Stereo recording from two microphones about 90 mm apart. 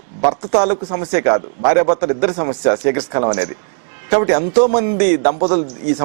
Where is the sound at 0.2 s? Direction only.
20° right (ahead or behind).